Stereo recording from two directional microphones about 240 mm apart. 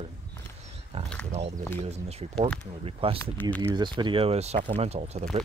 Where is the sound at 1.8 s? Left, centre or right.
Right.